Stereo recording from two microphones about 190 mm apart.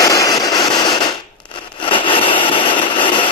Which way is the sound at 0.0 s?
15° left (ahead or behind).